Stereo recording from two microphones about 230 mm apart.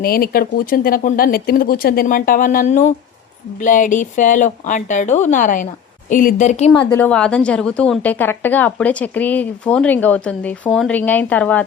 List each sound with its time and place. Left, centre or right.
0.0 s speech: left
6.9 s a woman's voice: centre